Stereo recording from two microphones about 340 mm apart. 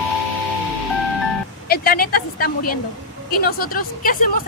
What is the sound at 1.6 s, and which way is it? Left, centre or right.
Speech, left.